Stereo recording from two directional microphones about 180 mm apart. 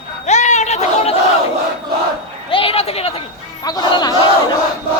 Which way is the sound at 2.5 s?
30° left (ahead or behind).